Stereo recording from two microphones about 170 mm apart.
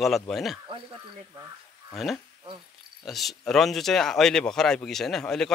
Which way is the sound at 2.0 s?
Centre (ahead or behind).